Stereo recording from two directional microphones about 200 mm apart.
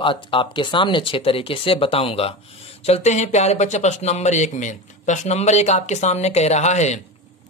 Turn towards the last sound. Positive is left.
turn(degrees=35)  # may be behind; listen again after turning